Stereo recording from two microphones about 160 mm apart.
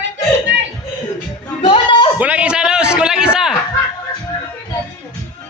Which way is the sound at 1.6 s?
30° left (ahead or behind).